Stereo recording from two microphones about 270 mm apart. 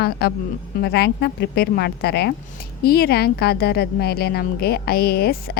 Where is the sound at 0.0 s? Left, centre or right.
Left.